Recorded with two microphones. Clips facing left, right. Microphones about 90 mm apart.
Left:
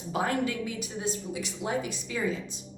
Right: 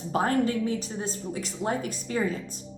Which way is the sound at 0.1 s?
40° right (ahead or behind).